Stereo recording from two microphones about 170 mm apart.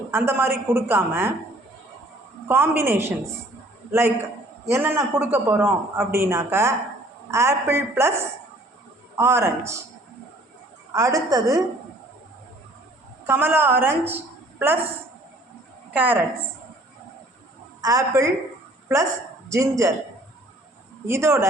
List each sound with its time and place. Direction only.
0.1 s a man's voice: 15° right (ahead or behind)
2.5 s a man's voice: 15° right (ahead or behind)
4.7 s a man's voice: 15° right (ahead or behind)
10.9 s a woman's voice: 20° right (ahead or behind)
13.2 s a woman's voice: 15° right (ahead or behind)
15.9 s a man's voice: 10° right (ahead or behind)
17.7 s a woman's voice: 20° right (ahead or behind)
21.1 s a man's voice: 15° right (ahead or behind)